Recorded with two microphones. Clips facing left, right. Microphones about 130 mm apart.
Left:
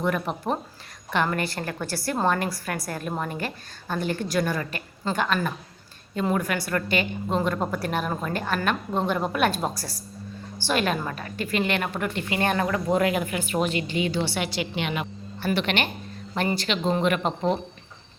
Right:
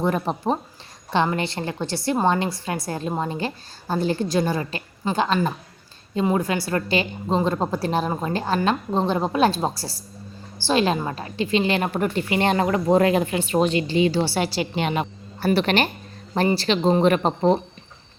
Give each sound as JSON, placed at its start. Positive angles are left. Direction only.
{"t": 0.0, "sound": "a woman's voice", "side_deg": -30}
{"t": 12.3, "sound": "speech", "side_deg": -25}